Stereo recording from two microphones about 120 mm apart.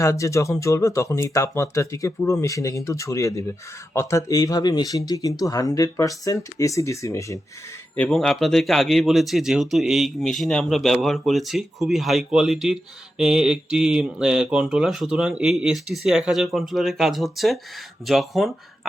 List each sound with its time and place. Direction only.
0.0 s speech: 25° left (ahead or behind)
8.1 s speech: centre (ahead or behind)